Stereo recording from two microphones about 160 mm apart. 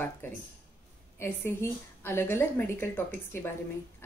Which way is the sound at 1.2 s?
15° left (ahead or behind).